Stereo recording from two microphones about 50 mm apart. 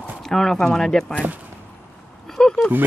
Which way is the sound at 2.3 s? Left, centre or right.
Centre.